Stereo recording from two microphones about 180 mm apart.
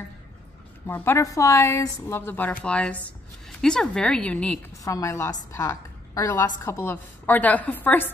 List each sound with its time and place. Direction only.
0.8 s a woman's voice: 15° left (ahead or behind)
4.8 s a woman's voice: 15° left (ahead or behind)